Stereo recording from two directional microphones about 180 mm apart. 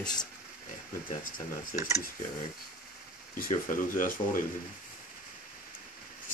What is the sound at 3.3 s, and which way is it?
Speech, 50° left (ahead or behind).